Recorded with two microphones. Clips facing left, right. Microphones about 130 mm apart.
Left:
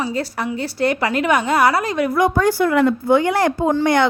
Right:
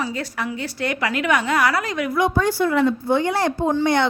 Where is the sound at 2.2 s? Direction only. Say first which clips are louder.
Left 2 dB; 45° left (ahead or behind).